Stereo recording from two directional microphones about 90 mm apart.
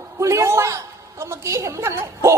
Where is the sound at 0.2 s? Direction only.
35° right (ahead or behind).